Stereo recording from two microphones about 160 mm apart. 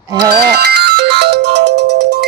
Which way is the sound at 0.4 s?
80° right.